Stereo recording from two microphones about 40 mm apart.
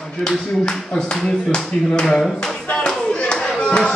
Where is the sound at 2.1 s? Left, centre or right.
Centre.